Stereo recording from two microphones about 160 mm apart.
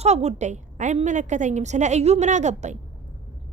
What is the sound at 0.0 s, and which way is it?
A woman's voice, 45° right (ahead or behind).